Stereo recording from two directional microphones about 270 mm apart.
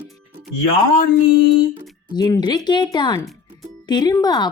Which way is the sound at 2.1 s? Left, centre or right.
Centre.